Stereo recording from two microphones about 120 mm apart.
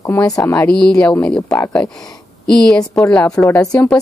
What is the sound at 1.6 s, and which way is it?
Speech, 20° left (ahead or behind).